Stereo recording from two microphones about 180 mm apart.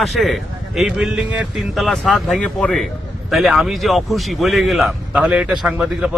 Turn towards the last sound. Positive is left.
turn(degrees=-5)  # may be behind; listen again after turning